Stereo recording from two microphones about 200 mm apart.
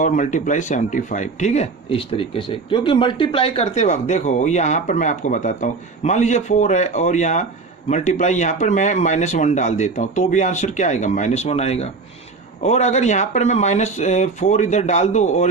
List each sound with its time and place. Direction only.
0.0 s speech: 40° left (ahead or behind)